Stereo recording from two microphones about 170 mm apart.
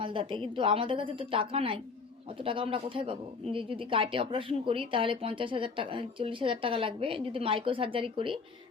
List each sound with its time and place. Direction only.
0.0 s speech: 30° right (ahead or behind)